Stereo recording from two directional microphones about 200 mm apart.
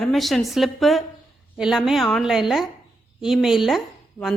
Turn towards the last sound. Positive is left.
turn(degrees=0)  # may be behind; listen again after turning